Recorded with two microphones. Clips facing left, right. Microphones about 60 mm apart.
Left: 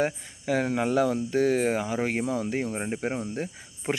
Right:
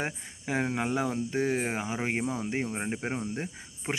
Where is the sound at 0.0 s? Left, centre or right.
Right.